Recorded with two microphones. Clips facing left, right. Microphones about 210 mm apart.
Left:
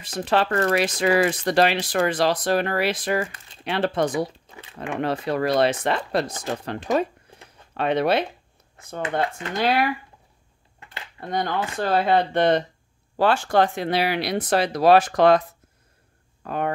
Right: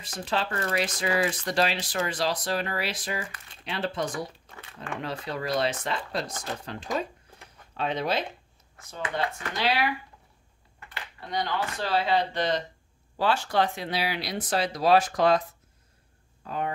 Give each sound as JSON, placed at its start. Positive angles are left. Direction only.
{"t": 0.2, "sound": "speech", "side_deg": 65}
{"t": 9.6, "sound": "speech", "side_deg": 50}
{"t": 11.1, "sound": "speech", "side_deg": 50}
{"t": 16.4, "sound": "speech", "side_deg": 60}